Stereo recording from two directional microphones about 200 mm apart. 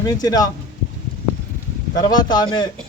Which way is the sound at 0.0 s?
20° left (ahead or behind).